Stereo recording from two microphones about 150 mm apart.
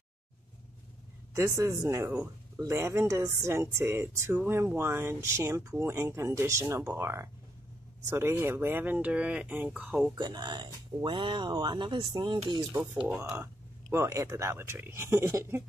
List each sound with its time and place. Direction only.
1.3 s speech: 20° right (ahead or behind)
10.1 s speech: 30° right (ahead or behind)
13.4 s speech: 20° right (ahead or behind)